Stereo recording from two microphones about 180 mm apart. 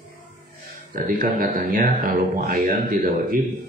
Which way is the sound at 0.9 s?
50° right (ahead or behind).